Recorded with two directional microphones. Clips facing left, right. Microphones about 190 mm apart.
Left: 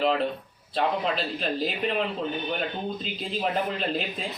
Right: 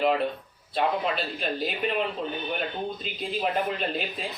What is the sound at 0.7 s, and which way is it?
Speech, 5° right (ahead or behind).